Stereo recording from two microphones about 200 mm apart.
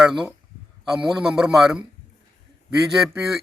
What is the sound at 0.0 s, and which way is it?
A man's voice, 5° right (ahead or behind).